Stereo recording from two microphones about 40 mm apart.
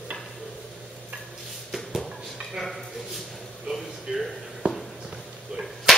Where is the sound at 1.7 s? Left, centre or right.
Centre.